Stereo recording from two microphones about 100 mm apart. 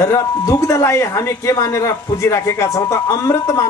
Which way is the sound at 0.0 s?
35° left (ahead or behind).